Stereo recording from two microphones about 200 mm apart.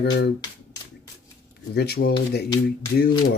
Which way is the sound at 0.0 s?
60° left (ahead or behind).